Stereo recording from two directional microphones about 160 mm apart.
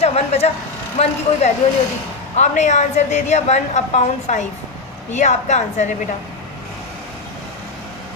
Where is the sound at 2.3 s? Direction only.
45° left (ahead or behind).